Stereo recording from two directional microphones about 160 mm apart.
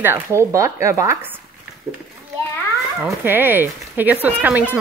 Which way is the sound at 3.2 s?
15° right (ahead or behind).